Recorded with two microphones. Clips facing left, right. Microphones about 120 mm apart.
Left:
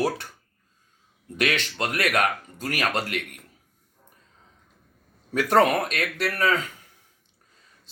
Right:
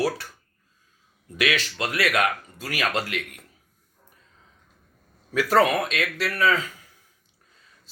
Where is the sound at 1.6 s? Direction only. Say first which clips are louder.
Even; 50° left (ahead or behind).